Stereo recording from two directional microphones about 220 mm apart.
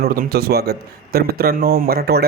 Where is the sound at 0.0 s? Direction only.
45° right (ahead or behind).